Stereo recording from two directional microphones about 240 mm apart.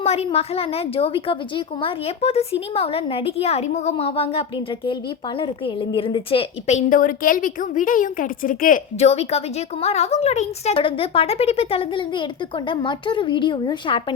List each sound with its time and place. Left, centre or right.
0.0 s a woman's voice: left